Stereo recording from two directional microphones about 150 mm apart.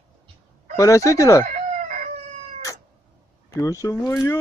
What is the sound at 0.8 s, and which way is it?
Speech, 20° left (ahead or behind).